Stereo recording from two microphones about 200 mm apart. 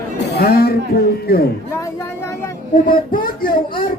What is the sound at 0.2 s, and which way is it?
Speech, 50° left (ahead or behind).